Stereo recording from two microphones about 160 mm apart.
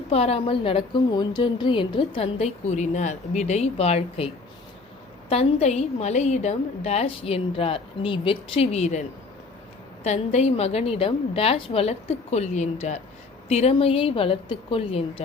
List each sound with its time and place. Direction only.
0.1 s a woman's voice: 40° left (ahead or behind)
5.3 s a woman's voice: 40° left (ahead or behind)